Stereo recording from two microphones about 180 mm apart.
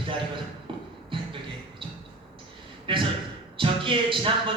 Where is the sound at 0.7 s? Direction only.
30° right (ahead or behind).